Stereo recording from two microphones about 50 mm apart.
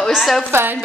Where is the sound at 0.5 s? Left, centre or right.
Right.